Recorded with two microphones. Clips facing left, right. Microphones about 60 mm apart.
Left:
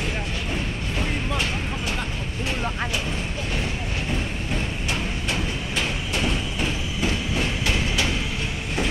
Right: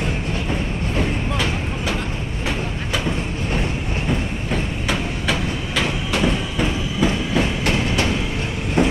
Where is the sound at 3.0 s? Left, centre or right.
Right.